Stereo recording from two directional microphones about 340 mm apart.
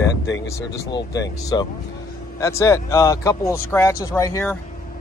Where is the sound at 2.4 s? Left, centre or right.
Centre.